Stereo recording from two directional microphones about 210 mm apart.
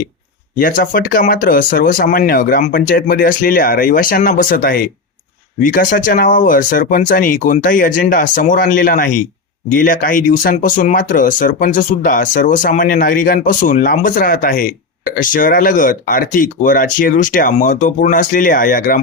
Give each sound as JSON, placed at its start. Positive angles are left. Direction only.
{"t": 0.6, "sound": "speech", "side_deg": 40}